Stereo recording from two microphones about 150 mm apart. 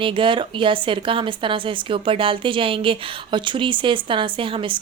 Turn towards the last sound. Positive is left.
turn(degrees=-35)  # may be behind; listen again after turning